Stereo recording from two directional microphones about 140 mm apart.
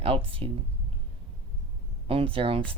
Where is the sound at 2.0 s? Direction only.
40° right (ahead or behind).